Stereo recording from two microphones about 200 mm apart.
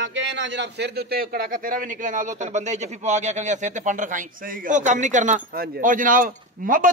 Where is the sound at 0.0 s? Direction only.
65° right (ahead or behind).